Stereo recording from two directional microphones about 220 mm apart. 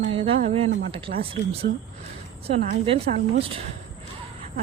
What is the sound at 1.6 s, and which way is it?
Speech, 45° right (ahead or behind).